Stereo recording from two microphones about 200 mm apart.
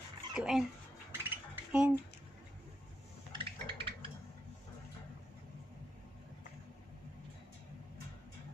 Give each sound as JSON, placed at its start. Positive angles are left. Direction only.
{"t": 0.3, "sound": "speech", "side_deg": -5}
{"t": 1.1, "sound": "dishes", "side_deg": -5}
{"t": 3.3, "sound": "a sound", "side_deg": -25}